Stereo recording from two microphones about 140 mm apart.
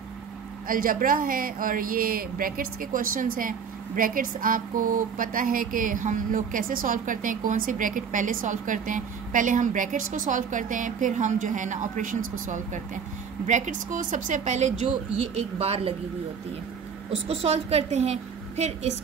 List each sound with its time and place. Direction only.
0.7 s a woman's voice: 80° right; by 15.9 s 45° right (ahead or behind)
17.1 s a woman's voice: 45° right (ahead or behind)